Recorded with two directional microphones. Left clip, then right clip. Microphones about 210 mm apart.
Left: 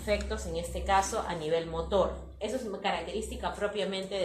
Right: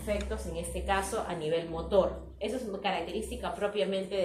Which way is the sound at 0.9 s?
20° left (ahead or behind).